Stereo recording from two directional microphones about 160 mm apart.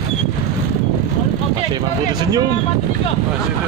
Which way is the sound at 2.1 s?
25° right (ahead or behind).